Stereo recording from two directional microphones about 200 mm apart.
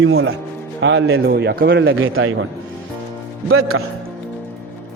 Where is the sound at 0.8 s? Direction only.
60° right (ahead or behind); by 2.4 s 85° right.